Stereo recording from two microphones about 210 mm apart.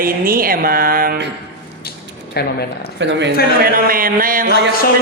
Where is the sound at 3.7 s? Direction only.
45° right (ahead or behind).